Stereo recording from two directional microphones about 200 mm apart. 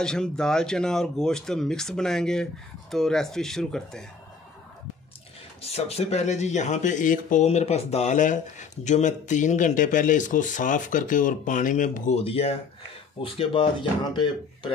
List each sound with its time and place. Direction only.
0.0 s speech: 5° left (ahead or behind)
5.6 s speech: 30° left (ahead or behind)